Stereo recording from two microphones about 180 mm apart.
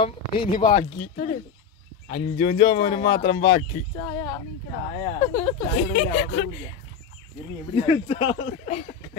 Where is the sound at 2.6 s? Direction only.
25° left (ahead or behind).